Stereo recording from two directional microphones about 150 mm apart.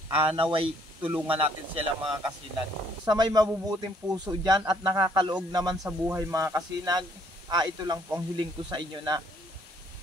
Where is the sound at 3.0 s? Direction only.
25° right (ahead or behind).